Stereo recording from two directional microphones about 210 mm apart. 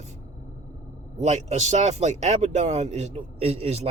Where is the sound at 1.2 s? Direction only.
30° right (ahead or behind).